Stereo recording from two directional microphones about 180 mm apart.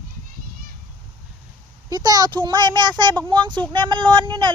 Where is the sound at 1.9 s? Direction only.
20° right (ahead or behind).